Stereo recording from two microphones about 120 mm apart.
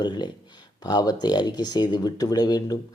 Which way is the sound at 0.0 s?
40° left (ahead or behind).